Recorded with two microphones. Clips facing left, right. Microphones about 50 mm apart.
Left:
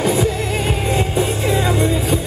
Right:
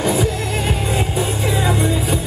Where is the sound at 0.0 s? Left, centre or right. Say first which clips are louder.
Left 1 dB; centre.